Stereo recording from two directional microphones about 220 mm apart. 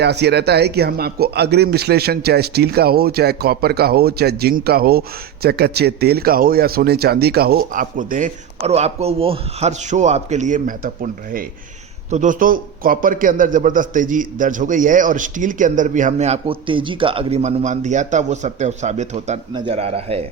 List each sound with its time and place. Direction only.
0.0 s a man's voice: 50° right (ahead or behind); by 20.2 s 25° right (ahead or behind)